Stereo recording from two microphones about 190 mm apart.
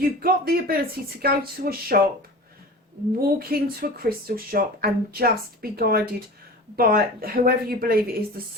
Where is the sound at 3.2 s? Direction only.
50° right (ahead or behind).